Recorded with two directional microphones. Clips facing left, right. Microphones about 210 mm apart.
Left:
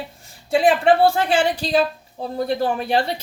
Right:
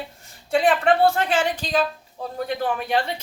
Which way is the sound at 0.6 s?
30° left (ahead or behind).